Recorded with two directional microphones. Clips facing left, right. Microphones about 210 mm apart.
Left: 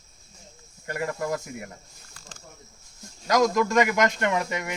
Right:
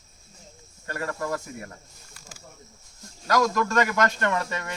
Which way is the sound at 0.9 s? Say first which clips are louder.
Left 1 dB; 15° left (ahead or behind).